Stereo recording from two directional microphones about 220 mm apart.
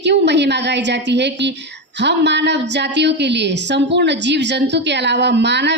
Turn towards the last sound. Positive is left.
turn(degrees=-50)  # may be behind; listen again after turning